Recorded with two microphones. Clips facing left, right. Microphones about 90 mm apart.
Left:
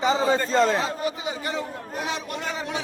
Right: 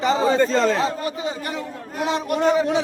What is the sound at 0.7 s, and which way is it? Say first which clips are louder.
Speech: right 3 dB; 20° left (ahead or behind).